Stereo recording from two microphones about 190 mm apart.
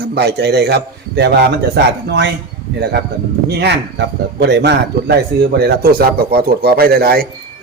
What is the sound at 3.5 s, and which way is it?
Speech, 60° right (ahead or behind).